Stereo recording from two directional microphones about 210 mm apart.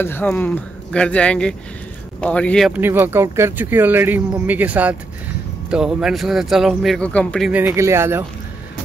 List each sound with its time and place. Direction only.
0.0 s speech: 10° left (ahead or behind)
2.8 s speech: 10° right (ahead or behind)